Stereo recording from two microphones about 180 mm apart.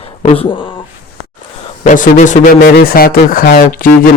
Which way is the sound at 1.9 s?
45° left (ahead or behind).